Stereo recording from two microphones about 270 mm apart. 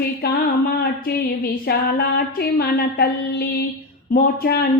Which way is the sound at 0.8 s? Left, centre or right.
Left.